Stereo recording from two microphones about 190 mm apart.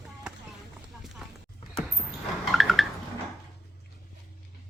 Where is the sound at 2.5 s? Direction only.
Centre (ahead or behind).